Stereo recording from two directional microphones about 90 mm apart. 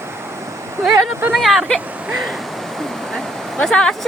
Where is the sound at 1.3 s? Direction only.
Centre (ahead or behind).